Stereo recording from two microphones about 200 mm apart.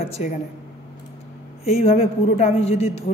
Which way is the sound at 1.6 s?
30° left (ahead or behind).